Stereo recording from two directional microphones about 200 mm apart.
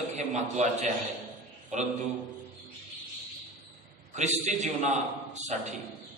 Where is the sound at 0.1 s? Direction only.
35° right (ahead or behind).